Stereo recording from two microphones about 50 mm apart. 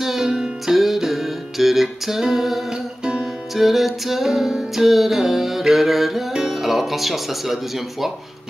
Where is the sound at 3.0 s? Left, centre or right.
Centre.